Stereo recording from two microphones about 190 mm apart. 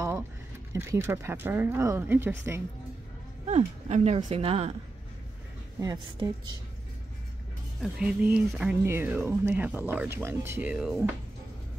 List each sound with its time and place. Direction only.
0.7 s speech: 15° right (ahead or behind)
3.4 s speech: 35° right (ahead or behind)
5.8 s a woman's voice: 20° right (ahead or behind)
7.8 s speech: 5° right (ahead or behind)